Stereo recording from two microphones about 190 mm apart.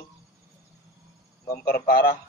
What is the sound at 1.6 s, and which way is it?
Speech, 50° left (ahead or behind).